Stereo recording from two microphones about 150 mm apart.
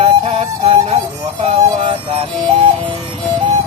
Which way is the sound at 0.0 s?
40° right (ahead or behind).